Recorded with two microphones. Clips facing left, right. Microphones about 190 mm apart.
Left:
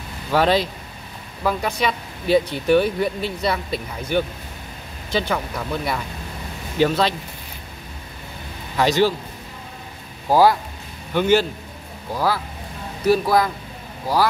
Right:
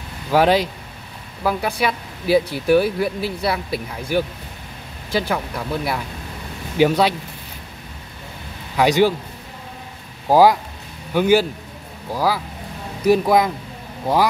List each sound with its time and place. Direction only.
0.3 s speech: 10° right (ahead or behind)
8.7 s speech: 15° right (ahead or behind)
10.3 s speech: 15° right (ahead or behind)